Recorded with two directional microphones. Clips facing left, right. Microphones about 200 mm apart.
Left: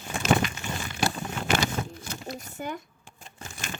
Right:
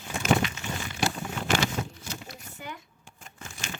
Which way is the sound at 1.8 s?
50° left (ahead or behind).